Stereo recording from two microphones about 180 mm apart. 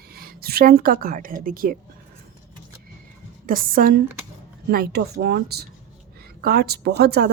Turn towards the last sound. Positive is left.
turn(degrees=-65)  # may be behind; listen again after turning